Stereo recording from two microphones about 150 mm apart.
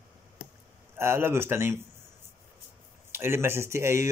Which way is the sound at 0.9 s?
15° right (ahead or behind).